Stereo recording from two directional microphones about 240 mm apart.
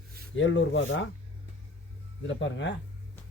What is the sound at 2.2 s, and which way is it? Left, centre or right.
Speech, left.